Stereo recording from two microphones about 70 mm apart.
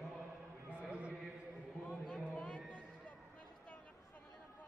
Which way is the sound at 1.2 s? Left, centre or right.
Centre.